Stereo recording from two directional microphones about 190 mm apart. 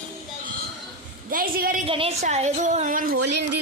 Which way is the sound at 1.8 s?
30° right (ahead or behind).